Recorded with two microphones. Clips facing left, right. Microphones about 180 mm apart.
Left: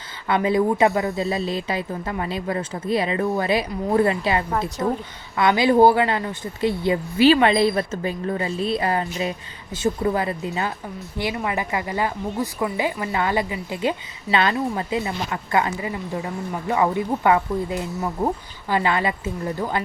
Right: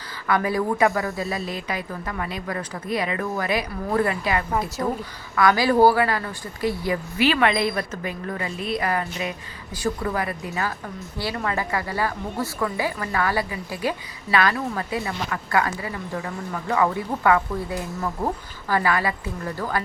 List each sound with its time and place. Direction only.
0.3 s a woman's voice: 25° left (ahead or behind)